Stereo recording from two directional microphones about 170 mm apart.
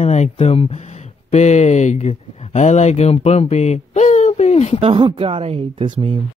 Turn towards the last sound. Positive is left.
turn(degrees=-30)  # may be behind; listen again after turning